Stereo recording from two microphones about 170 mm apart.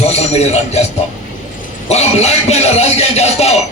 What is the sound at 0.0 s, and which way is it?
Speech, 40° left (ahead or behind).